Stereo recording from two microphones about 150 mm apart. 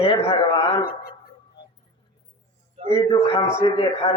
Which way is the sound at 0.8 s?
90° left.